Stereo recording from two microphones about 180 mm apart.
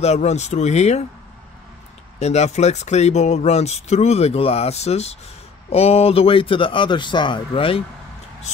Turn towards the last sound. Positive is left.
turn(degrees=30)  # may be behind; listen again after turning